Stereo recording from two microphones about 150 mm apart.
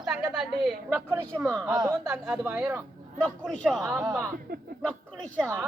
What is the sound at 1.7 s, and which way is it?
Speech, 20° right (ahead or behind).